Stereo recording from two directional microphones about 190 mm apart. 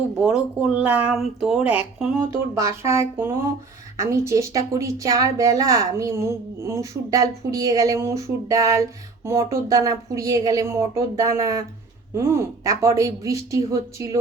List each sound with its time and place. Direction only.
0.2 s a woman's voice: 5° right (ahead or behind)